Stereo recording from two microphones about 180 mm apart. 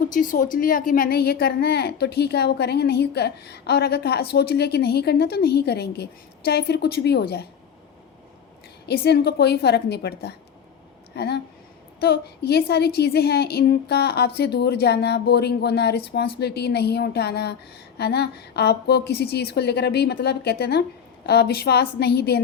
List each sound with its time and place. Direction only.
0.1 s a woman's voice: 50° left (ahead or behind); by 7.4 s 65° left (ahead or behind)
8.9 s a woman's voice: 65° left (ahead or behind)